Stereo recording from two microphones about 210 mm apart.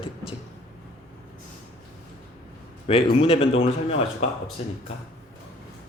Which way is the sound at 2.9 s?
25° left (ahead or behind).